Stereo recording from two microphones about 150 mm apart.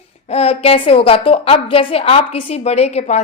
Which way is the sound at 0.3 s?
45° left (ahead or behind).